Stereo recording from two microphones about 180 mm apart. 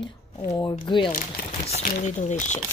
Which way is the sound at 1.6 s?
40° left (ahead or behind).